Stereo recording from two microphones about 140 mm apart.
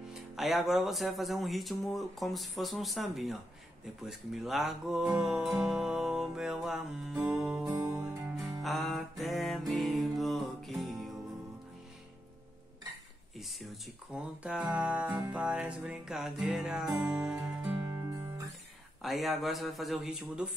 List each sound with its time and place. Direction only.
0.1 s speech: centre (ahead or behind)
2.0 s music: centre (ahead or behind)
7.6 s music: 30° right (ahead or behind)
8.6 s mantra: centre (ahead or behind)
13.4 s a sound: centre (ahead or behind)
14.1 s music: 10° right (ahead or behind)
17.9 s music: 20° right (ahead or behind)
19.0 s music: centre (ahead or behind)